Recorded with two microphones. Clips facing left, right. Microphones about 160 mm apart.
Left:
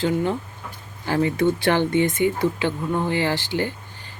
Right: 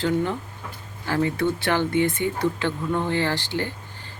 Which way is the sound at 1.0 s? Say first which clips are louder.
Left 3 dB; 20° left (ahead or behind).